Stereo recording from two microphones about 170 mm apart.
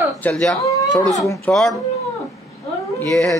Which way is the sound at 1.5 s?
5° left (ahead or behind).